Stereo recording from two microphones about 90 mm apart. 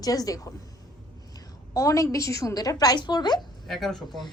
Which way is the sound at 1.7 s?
35° left (ahead or behind).